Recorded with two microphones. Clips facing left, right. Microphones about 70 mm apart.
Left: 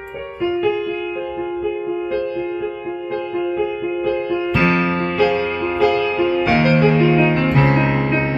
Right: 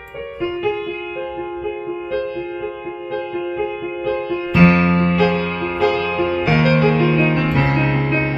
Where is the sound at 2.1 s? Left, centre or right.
Centre.